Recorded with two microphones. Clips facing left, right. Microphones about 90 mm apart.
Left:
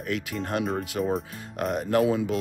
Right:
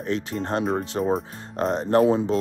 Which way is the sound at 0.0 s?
30° right (ahead or behind).